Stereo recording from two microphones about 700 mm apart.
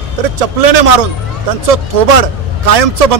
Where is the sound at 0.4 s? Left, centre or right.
Right.